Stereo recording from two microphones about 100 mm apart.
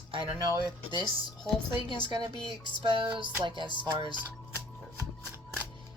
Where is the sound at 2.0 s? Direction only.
50° right (ahead or behind).